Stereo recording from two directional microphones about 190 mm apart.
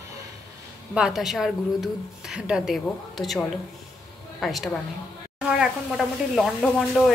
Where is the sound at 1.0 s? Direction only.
5° right (ahead or behind).